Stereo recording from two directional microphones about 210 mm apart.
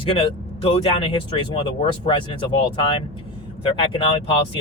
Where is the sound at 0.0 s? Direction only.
25° left (ahead or behind).